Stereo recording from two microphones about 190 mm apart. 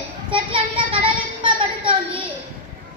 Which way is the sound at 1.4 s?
25° right (ahead or behind).